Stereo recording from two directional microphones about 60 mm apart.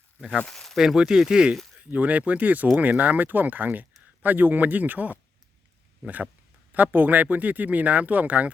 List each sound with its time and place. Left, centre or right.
0.3 s speech: centre
0.8 s speech: centre
1.8 s speech: right
6.7 s speech: right